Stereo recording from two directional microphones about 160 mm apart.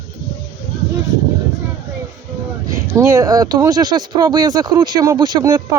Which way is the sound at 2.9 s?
20° right (ahead or behind).